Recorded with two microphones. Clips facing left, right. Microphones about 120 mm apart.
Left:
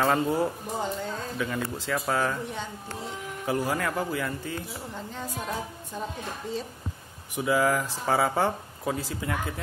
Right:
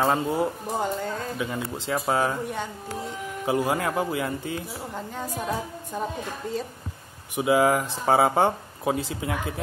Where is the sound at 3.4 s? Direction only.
20° right (ahead or behind).